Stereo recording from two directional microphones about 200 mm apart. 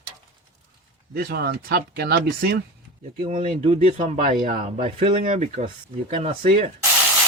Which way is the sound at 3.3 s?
35° right (ahead or behind).